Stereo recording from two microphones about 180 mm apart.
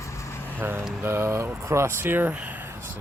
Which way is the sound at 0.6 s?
10° right (ahead or behind).